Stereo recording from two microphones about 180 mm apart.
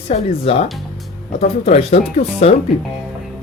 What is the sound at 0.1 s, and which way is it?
Speech, 35° left (ahead or behind).